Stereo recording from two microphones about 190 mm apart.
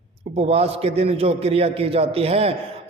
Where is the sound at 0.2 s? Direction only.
30° right (ahead or behind).